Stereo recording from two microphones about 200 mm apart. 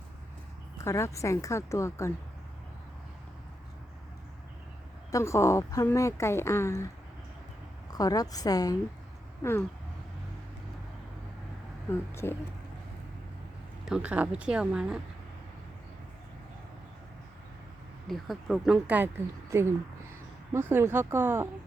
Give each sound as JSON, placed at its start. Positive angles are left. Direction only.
{"t": 0.9, "sound": "speech", "side_deg": 15}
{"t": 5.1, "sound": "speech", "side_deg": 15}
{"t": 7.9, "sound": "a woman's voice", "side_deg": 20}
{"t": 11.9, "sound": "speech", "side_deg": 10}
{"t": 13.8, "sound": "a woman's voice", "side_deg": -5}
{"t": 18.1, "sound": "a woman's voice", "side_deg": 0}